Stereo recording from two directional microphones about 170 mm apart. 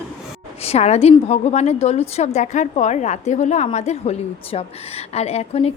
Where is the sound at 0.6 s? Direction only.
40° left (ahead or behind).